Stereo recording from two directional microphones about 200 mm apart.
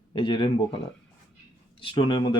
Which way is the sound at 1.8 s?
25° left (ahead or behind).